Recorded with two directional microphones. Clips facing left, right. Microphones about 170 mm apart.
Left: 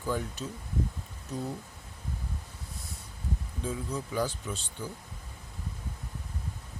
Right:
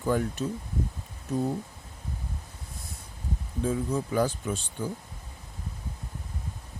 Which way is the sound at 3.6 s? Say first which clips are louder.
Right 6 dB; 50° right (ahead or behind).